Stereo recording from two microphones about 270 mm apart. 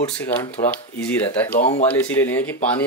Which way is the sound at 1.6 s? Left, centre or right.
Left.